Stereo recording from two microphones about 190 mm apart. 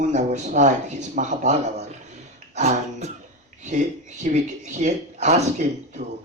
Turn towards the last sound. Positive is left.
turn(degrees=-40)  # may be behind; listen again after turning